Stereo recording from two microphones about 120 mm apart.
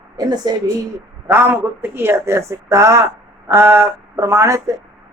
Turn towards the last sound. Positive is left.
turn(degrees=-25)  # may be behind; listen again after turning